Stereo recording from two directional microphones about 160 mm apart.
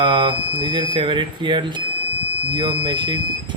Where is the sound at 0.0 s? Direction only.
30° right (ahead or behind).